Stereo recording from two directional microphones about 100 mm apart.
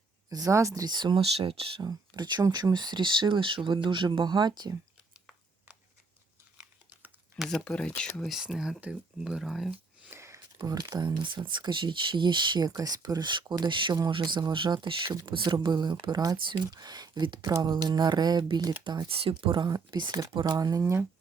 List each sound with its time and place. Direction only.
0.3 s speech: 35° right (ahead or behind)
1.2 s speech: 75° right (ahead or behind)
1.8 s speech: 45° right (ahead or behind)
7.3 s speech: centre (ahead or behind)
8.3 s speech: 5° right (ahead or behind)
10.1 s a sound: 30° right (ahead or behind)
10.6 s speech: 40° right (ahead or behind)
19.0 s speech: 65° right (ahead or behind)
19.3 s speech: 50° right (ahead or behind); by 21.1 s 30° right (ahead or behind)